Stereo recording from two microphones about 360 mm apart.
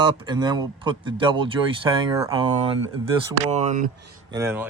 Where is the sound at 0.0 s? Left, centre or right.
Centre.